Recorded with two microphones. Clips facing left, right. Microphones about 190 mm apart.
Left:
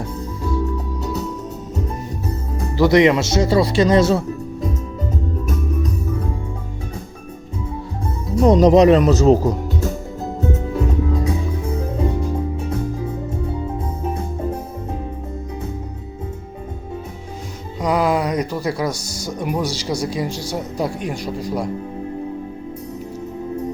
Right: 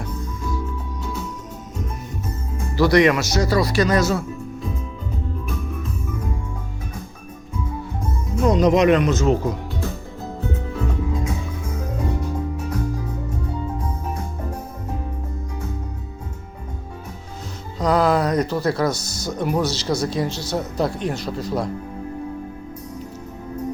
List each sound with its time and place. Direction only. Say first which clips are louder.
2.2 s music: left 5 dB; 35° left (ahead or behind)
2.7 s speech: left 2 dB; 20° left (ahead or behind)
5.5 s music: left 6 dB; 40° left (ahead or behind)
8.4 s speech: left 5 dB; 35° left (ahead or behind)
10.4 s music: left 5 dB; 40° left (ahead or behind)
17.7 s speech: even; 10° left (ahead or behind)